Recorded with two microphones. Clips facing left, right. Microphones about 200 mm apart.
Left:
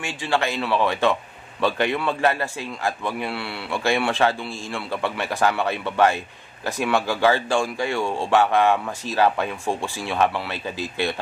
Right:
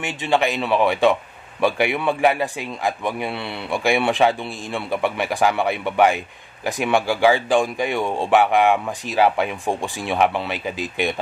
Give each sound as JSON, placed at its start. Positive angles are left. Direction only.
{"t": 0.0, "sound": "a man's voice", "side_deg": -20}